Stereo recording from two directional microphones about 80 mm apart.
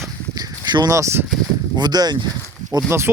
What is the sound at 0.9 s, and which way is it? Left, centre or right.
Speech, right.